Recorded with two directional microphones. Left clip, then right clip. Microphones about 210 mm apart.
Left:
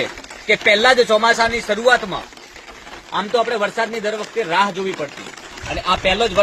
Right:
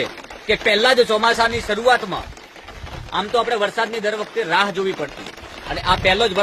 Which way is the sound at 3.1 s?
15° right (ahead or behind).